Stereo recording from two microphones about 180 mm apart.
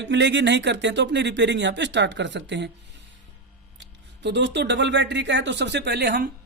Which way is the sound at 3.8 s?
75° right (ahead or behind).